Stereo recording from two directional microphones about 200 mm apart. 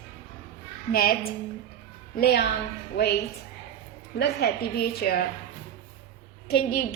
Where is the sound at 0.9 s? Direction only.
50° left (ahead or behind).